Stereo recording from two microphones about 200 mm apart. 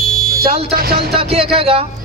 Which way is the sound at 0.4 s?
30° right (ahead or behind).